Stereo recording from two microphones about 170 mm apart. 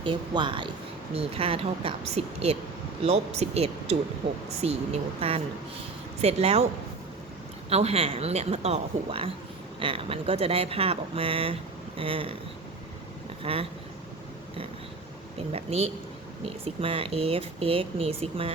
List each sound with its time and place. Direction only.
0.0 s speech: 30° right (ahead or behind)
7.7 s speech: 35° right (ahead or behind)
13.4 s speech: 35° right (ahead or behind)
15.4 s speech: 35° right (ahead or behind)